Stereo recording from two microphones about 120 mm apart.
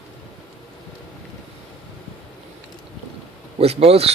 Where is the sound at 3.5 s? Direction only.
55° right (ahead or behind).